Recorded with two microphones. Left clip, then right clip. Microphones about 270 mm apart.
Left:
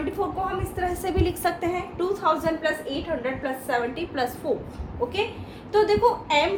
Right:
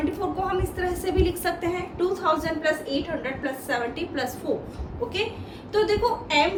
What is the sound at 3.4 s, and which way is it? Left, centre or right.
Speech, centre.